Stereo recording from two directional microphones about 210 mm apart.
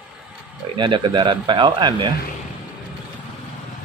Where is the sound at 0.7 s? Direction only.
20° right (ahead or behind).